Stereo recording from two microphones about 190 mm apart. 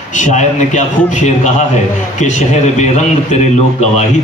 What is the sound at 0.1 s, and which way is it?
A man's voice, 40° left (ahead or behind).